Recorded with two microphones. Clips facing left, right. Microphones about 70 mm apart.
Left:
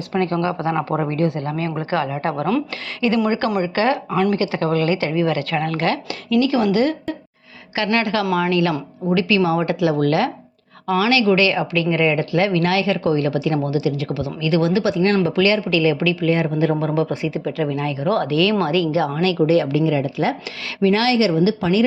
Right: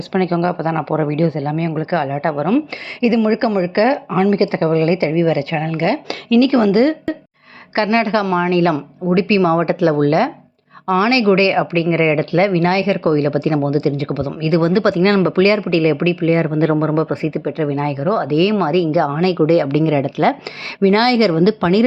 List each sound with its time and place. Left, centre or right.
0.1 s speech: right
0.3 s speech: right
3.2 s a woman's voice: centre
6.1 s speech: right
6.6 s speech: right
8.2 s a woman's voice: centre
8.4 s speech: right
14.7 s speech: right
15.2 s speech: right
16.5 s speech: right
16.9 s speech: right
18.1 s speech: right
19.6 s speech: right